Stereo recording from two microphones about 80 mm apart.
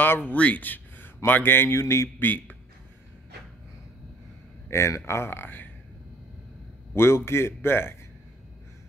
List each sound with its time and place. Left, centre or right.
0.0 s speech: left
4.6 s a man's voice: left
6.9 s a man's voice: left